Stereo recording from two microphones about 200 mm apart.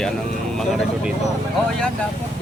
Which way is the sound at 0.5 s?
Centre (ahead or behind).